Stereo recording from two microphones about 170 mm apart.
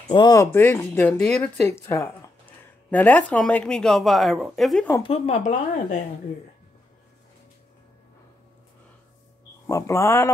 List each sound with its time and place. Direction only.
0.1 s speech: 25° left (ahead or behind); by 4.9 s 5° left (ahead or behind)
5.0 s speech: 35° left (ahead or behind)
9.7 s speech: 15° left (ahead or behind)